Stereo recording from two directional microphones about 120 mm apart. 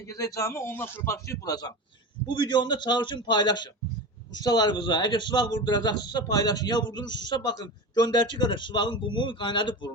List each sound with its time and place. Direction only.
0.1 s a man's voice: 30° left (ahead or behind)